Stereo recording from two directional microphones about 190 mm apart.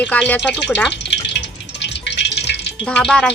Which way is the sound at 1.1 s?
65° left (ahead or behind).